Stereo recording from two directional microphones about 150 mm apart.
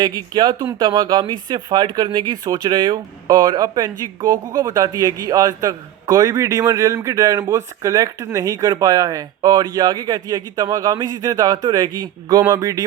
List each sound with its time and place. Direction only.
0.0 s a man's voice: 30° right (ahead or behind)